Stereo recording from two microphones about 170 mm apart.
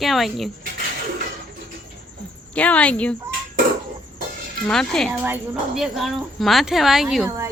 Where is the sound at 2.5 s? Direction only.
10° left (ahead or behind).